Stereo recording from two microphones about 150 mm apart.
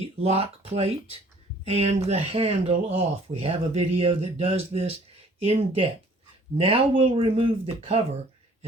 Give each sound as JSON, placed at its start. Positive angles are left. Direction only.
{"t": 0.0, "sound": "speech", "side_deg": -45}